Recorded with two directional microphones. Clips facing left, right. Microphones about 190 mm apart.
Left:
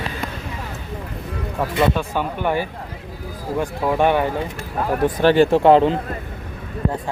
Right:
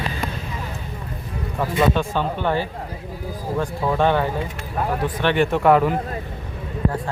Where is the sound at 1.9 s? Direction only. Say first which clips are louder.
Right 1 dB; 10° left (ahead or behind).